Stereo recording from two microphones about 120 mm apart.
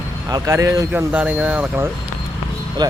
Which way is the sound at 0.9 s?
10° right (ahead or behind).